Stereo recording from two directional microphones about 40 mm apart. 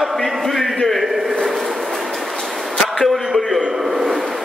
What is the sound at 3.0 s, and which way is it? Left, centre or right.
Speech, centre.